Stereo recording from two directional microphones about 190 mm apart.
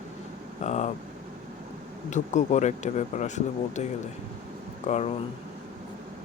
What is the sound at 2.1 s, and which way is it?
Speech, 40° left (ahead or behind).